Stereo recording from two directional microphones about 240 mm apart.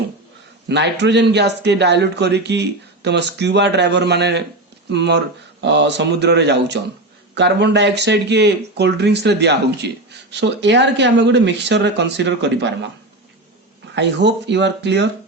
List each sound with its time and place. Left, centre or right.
0.7 s a man's voice: right
13.9 s a man's voice: right